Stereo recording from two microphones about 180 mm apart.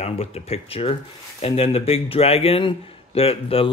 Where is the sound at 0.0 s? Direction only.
35° left (ahead or behind).